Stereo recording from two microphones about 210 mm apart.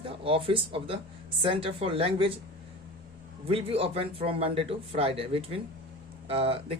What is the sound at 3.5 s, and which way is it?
Speech, 25° right (ahead or behind).